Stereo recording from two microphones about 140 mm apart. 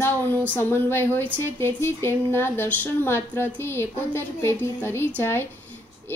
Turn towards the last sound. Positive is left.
turn(degrees=15)  # may be behind; listen again after turning